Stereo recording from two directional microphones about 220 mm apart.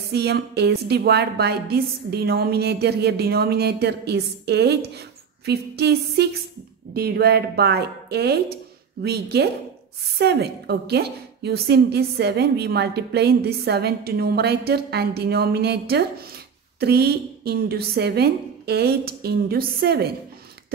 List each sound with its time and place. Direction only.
0.1 s a woman's voice: 50° right (ahead or behind)